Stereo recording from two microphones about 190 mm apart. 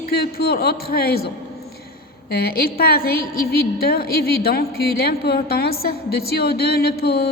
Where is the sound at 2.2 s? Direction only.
50° left (ahead or behind).